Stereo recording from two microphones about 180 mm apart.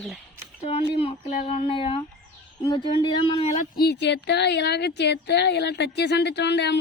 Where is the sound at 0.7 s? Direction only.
30° left (ahead or behind).